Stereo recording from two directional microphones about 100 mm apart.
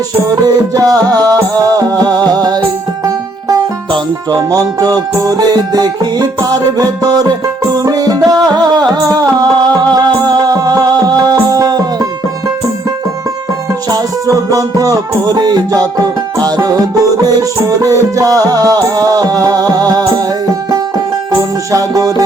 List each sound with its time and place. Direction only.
0.4 s music: 35° right (ahead or behind)
4.4 s music: 35° right (ahead or behind)
13.9 s music: 35° right (ahead or behind)
21.7 s music: 35° right (ahead or behind)